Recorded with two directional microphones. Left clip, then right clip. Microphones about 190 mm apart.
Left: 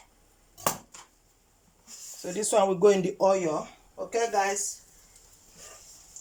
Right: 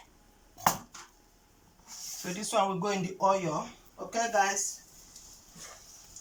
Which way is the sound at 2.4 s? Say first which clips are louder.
Left 7 dB; 35° left (ahead or behind).